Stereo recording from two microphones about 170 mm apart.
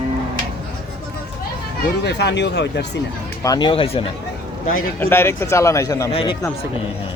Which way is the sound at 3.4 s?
25° left (ahead or behind).